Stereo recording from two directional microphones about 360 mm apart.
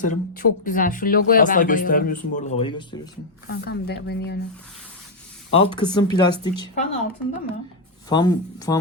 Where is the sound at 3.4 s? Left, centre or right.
Left.